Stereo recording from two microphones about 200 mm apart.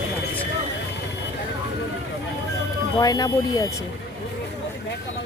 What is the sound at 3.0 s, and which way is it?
Speech, 20° left (ahead or behind).